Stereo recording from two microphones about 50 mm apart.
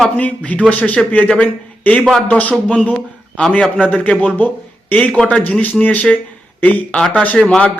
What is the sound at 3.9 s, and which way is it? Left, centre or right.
Speech, left.